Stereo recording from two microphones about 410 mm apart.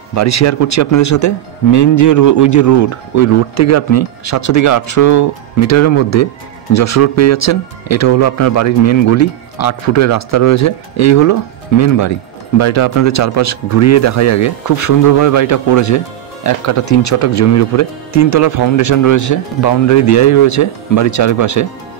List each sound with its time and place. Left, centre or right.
0.1 s speech: left